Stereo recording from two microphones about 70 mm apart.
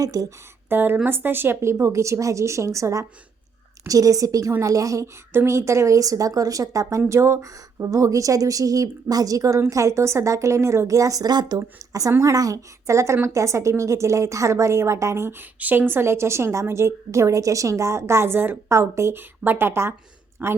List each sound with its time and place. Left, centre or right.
0.0 s a woman's voice: right
0.7 s a woman's voice: right
5.3 s a woman's voice: right
15.4 s a woman's voice: right
19.1 s a woman's voice: right